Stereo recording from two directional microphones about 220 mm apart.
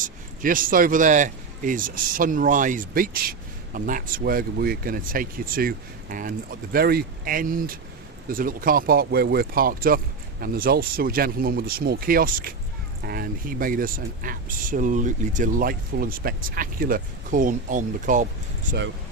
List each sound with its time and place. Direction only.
0.0 s speech: 40° right (ahead or behind)